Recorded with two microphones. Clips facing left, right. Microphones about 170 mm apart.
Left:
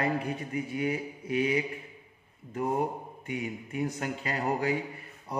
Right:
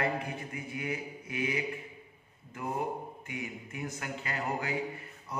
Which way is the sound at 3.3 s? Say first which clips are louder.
Left 7 dB; 35° left (ahead or behind).